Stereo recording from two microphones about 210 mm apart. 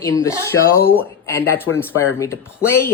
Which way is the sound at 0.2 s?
15° left (ahead or behind).